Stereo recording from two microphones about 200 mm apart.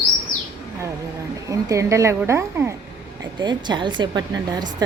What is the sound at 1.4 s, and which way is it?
A woman's voice, 15° right (ahead or behind).